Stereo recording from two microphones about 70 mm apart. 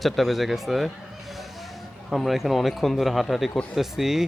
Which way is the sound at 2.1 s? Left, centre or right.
Centre.